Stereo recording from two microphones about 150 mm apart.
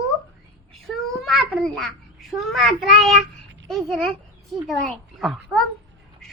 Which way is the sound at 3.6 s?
Centre (ahead or behind).